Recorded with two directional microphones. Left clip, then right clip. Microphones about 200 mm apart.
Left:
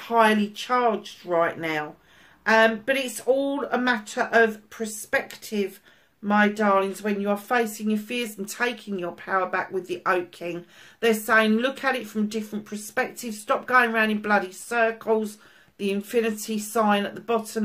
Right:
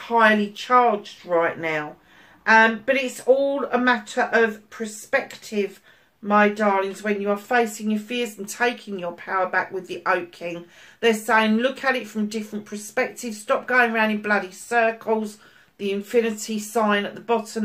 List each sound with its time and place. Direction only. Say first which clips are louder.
0.1 s speech: right 2 dB; 50° left (ahead or behind)